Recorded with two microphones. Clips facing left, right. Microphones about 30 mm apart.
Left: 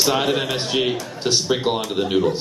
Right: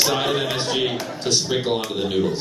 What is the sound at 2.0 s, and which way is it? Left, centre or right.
Speech, centre.